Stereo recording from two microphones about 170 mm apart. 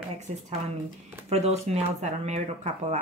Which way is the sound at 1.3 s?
40° right (ahead or behind).